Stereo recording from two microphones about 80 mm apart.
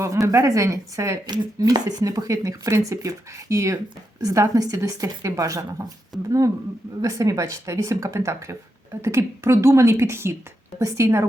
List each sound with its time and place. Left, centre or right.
0.0 s a woman's voice: right
7.0 s speech: right